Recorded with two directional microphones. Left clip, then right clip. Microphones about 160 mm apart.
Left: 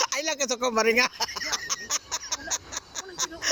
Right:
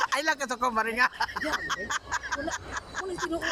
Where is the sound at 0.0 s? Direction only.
15° left (ahead or behind).